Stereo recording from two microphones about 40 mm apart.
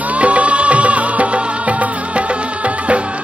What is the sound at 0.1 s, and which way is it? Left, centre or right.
Music, right.